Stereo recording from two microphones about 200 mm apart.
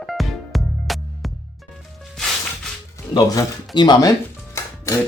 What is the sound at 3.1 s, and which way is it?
Speech, 15° left (ahead or behind).